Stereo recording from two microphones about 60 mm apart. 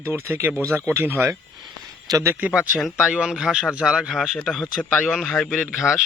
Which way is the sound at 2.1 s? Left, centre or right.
Right.